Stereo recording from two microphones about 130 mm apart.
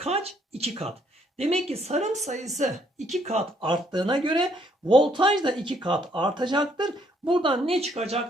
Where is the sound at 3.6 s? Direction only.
35° right (ahead or behind); by 8.2 s 55° right (ahead or behind).